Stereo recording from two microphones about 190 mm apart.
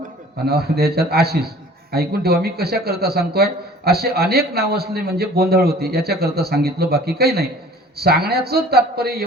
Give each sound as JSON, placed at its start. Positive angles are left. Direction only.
{"t": 0.4, "sound": "a man's voice", "side_deg": -55}